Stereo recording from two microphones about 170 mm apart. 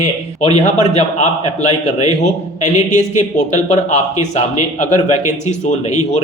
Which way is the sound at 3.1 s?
40° left (ahead or behind).